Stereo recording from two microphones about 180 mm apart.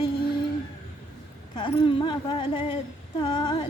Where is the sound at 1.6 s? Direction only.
25° left (ahead or behind).